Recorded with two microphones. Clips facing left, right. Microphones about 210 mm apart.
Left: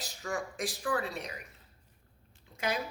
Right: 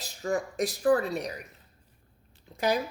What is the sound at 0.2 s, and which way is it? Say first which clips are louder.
Speech: right 7 dB; 35° right (ahead or behind).